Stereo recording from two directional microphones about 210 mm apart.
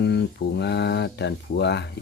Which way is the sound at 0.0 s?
55° left (ahead or behind).